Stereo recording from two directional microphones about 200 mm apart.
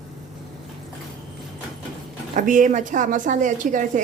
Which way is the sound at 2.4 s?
40° right (ahead or behind).